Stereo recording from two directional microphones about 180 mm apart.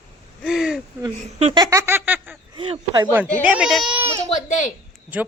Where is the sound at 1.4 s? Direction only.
35° right (ahead or behind).